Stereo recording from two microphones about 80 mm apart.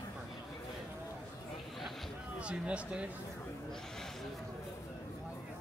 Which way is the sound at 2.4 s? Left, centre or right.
Centre.